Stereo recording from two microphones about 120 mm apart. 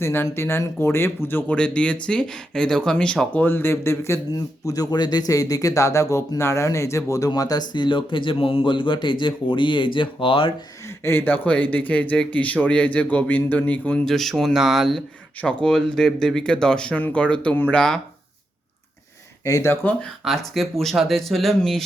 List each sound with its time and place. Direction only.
0.0 s speech: 20° left (ahead or behind); by 10.5 s 45° left (ahead or behind)
10.8 s speech: 20° left (ahead or behind)
19.5 s speech: 25° left (ahead or behind)
19.7 s speech: 15° left (ahead or behind)
20.2 s speech: centre (ahead or behind)